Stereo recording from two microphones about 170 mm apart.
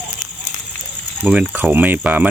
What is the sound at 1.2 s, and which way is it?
Speech, 10° right (ahead or behind).